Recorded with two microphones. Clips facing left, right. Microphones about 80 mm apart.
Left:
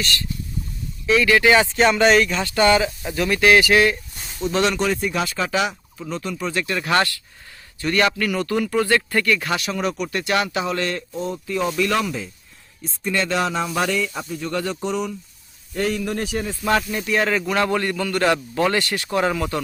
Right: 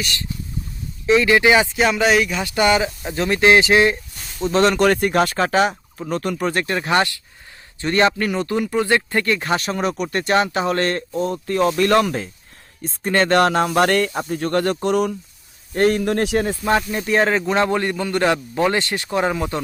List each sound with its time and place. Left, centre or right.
0.0 s speech: right
4.4 s speech: right
4.8 s speech: right
6.9 s speech: right
14.1 s speech: right
14.3 s speech: right
16.9 s speech: right